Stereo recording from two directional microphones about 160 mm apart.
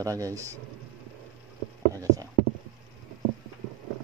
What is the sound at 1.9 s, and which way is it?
Clip-clop, 20° right (ahead or behind).